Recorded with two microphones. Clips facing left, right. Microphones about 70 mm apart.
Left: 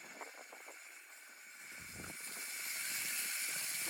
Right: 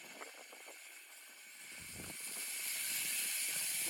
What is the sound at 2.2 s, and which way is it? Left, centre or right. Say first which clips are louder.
Vehicle: left 2 dB; left.